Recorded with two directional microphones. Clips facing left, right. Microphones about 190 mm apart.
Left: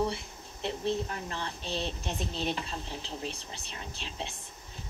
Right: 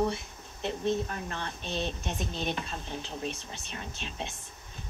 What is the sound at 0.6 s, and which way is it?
A woman's voice, 30° left (ahead or behind).